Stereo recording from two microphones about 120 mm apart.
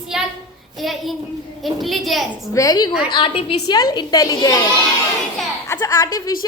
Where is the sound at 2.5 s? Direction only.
30° left (ahead or behind).